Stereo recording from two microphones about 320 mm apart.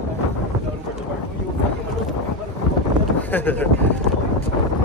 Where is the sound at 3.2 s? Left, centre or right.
Centre.